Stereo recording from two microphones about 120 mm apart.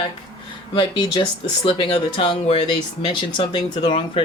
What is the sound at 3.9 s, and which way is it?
Speech, 50° left (ahead or behind).